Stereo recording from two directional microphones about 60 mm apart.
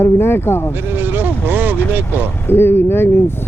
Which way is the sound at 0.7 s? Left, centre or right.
Right.